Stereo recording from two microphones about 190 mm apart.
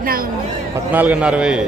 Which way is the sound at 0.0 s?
50° right (ahead or behind).